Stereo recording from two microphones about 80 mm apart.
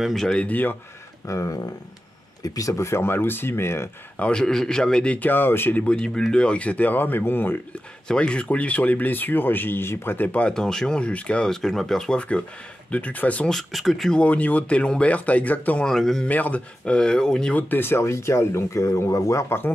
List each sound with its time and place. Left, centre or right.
0.0 s speech: centre
0.5 s speech: left
1.2 s speech: left
2.7 s speech: left
4.2 s speech: centre; by 5.9 s left
5.9 s speech: centre; by 7.5 s left
8.1 s speech: centre
10.5 s speech: centre
13.5 s speech: centre
14.2 s speech: centre
15.8 s speech: centre
16.3 s speech: centre
17.6 s speech: left